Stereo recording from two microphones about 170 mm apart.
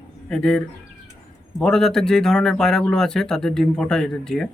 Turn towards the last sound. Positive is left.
turn(degrees=5)  # may be behind; listen again after turning